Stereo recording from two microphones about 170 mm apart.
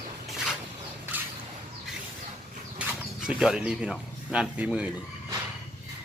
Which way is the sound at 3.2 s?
5° right (ahead or behind).